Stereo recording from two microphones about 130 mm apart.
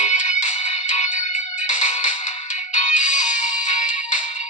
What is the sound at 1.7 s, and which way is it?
Music, 70° left (ahead or behind).